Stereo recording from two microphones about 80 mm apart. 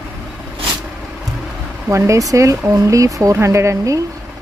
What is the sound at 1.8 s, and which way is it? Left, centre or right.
Speech, right.